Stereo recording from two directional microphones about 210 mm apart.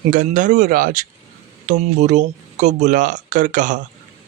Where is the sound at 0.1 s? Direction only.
40° right (ahead or behind).